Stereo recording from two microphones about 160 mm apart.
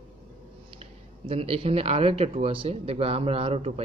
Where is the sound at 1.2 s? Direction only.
40° right (ahead or behind).